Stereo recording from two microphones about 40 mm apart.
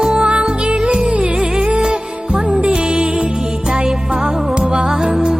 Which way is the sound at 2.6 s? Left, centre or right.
Right.